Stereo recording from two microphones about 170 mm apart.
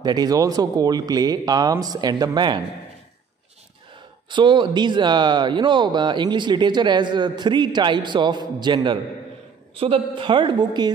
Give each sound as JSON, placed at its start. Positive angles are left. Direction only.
{"t": 0.0, "sound": "speech", "side_deg": -25}
{"t": 4.3, "sound": "speech", "side_deg": -30}